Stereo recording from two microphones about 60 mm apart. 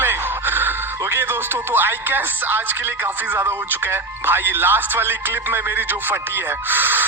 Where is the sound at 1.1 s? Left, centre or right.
Right.